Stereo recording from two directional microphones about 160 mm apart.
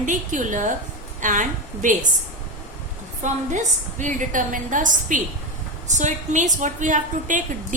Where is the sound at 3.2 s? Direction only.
50° right (ahead or behind).